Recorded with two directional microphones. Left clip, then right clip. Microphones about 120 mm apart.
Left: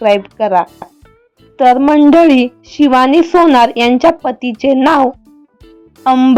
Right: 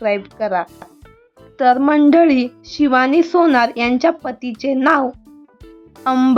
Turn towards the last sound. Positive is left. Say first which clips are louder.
# left 6 dB
turn(degrees=15)  # may be behind; listen again after turning